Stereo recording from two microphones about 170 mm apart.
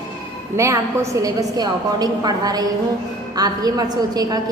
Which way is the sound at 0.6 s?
15° right (ahead or behind).